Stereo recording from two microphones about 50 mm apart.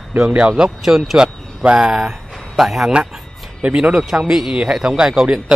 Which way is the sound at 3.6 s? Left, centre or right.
Right.